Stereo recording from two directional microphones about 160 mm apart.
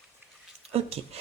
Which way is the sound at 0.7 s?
40° right (ahead or behind).